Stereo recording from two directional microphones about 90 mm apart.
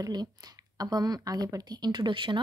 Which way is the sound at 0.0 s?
45° right (ahead or behind).